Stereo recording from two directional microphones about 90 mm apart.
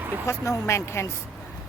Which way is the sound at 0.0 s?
25° right (ahead or behind).